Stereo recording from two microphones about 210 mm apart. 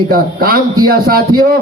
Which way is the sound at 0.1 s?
45° right (ahead or behind).